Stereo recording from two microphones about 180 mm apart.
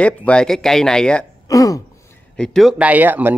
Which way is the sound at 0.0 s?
5° left (ahead or behind).